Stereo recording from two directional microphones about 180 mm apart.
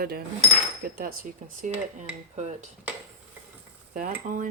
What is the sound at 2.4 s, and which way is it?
Dishes, 40° right (ahead or behind).